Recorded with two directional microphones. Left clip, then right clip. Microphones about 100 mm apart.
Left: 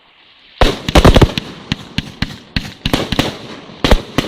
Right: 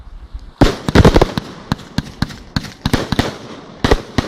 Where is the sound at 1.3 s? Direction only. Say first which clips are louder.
Left 2 dB; 65° right (ahead or behind).